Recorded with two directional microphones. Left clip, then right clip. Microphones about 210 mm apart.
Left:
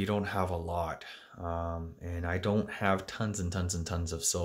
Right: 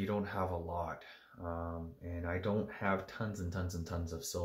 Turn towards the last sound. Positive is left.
turn(degrees=45)  # may be behind; listen again after turning